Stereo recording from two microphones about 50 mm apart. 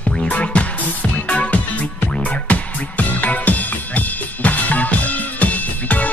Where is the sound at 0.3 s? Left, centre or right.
Left.